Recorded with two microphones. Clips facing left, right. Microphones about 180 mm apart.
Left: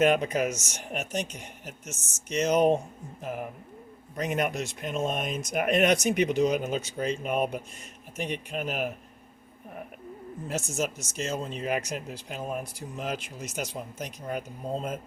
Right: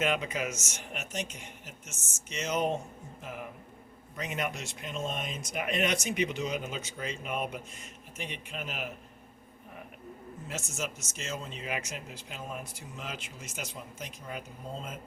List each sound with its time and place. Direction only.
0.0 s speech: 45° left (ahead or behind)
4.2 s speech: 50° left (ahead or behind)
4.9 s speech: 55° left (ahead or behind)
10.5 s speech: 40° left (ahead or behind)